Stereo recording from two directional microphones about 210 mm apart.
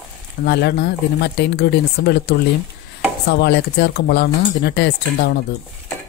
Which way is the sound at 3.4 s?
50° left (ahead or behind).